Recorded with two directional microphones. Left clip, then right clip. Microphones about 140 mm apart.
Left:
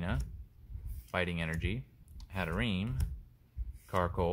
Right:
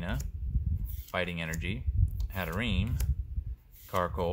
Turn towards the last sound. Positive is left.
turn(degrees=30)  # may be behind; listen again after turning